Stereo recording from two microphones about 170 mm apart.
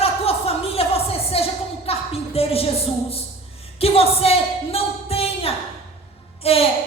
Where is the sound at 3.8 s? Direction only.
35° left (ahead or behind).